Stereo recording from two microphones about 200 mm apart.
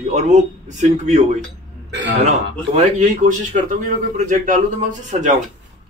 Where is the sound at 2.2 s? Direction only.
35° right (ahead or behind).